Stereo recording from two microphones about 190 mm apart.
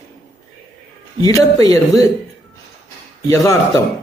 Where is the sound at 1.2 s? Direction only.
20° left (ahead or behind).